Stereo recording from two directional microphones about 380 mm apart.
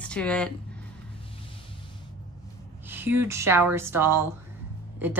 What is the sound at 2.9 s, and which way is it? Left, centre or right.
Speech, centre.